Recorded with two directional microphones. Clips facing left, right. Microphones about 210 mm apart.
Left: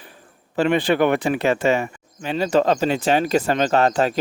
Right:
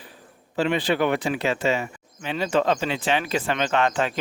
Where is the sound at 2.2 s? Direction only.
40° left (ahead or behind).